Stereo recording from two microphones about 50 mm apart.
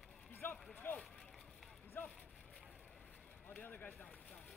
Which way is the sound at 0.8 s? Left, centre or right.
Left.